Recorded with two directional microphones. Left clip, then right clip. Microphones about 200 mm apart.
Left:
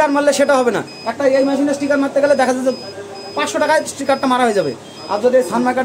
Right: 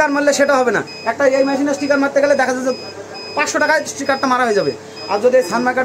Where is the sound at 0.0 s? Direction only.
10° left (ahead or behind).